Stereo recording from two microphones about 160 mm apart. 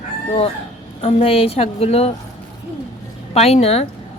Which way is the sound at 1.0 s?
40° left (ahead or behind).